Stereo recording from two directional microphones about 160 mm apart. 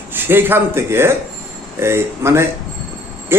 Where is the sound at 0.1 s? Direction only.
15° right (ahead or behind).